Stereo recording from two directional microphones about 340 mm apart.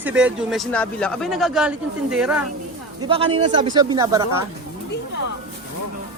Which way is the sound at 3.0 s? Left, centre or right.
Centre.